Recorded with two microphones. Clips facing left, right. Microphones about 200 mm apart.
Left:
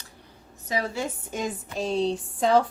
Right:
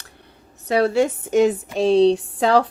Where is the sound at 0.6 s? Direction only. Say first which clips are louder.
Right 11 dB; 70° right (ahead or behind).